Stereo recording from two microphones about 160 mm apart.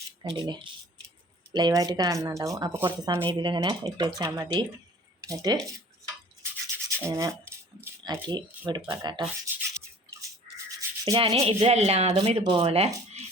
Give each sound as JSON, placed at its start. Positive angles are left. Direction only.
{"t": 0.2, "sound": "speech", "side_deg": -25}
{"t": 6.8, "sound": "speech", "side_deg": -20}
{"t": 8.0, "sound": "speech", "side_deg": -30}
{"t": 10.8, "sound": "rub", "side_deg": -20}
{"t": 11.2, "sound": "speech", "side_deg": -35}
{"t": 12.4, "sound": "speech", "side_deg": -30}